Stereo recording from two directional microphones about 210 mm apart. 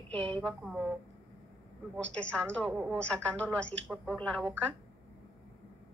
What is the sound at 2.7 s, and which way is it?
Speech, 5° right (ahead or behind).